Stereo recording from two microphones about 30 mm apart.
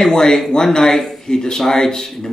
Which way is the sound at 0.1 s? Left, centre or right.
Left.